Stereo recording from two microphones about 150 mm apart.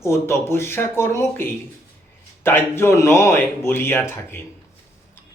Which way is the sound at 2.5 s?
15° left (ahead or behind).